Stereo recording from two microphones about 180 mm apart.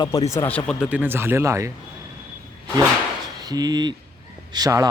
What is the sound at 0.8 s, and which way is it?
Speech, 5° right (ahead or behind).